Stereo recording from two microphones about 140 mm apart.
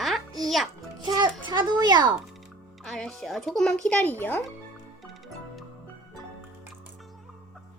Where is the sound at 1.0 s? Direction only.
30° right (ahead or behind).